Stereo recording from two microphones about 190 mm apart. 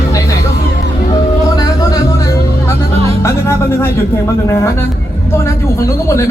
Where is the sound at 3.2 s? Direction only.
15° left (ahead or behind).